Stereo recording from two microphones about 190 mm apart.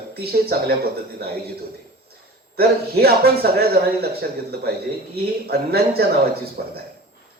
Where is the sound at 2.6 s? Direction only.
55° right (ahead or behind).